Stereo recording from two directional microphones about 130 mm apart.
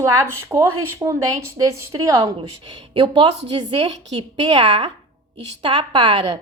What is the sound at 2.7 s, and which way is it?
Speech, 40° right (ahead or behind).